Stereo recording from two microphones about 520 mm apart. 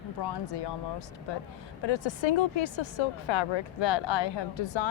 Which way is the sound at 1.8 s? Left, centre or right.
Left.